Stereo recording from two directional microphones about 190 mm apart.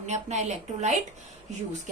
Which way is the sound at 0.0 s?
35° right (ahead or behind).